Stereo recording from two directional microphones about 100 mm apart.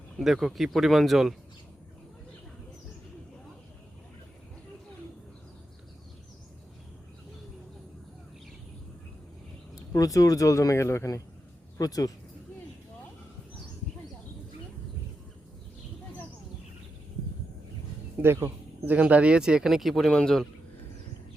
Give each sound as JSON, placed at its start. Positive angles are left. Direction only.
{"t": 0.2, "sound": "speech", "side_deg": 0}
{"t": 9.9, "sound": "speech", "side_deg": 35}
{"t": 18.2, "sound": "speech", "side_deg": -25}